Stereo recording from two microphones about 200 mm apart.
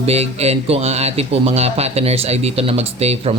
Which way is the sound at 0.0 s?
30° right (ahead or behind).